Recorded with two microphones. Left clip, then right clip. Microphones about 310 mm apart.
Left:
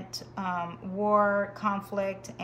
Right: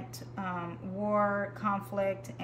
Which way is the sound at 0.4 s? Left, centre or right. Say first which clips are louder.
Left 5 dB; centre.